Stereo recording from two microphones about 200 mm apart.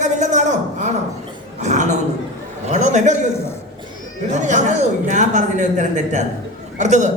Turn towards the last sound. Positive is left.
turn(degrees=-35)  # may be behind; listen again after turning